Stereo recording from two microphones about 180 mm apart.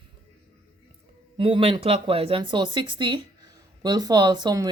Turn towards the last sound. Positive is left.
turn(degrees=-20)  # may be behind; listen again after turning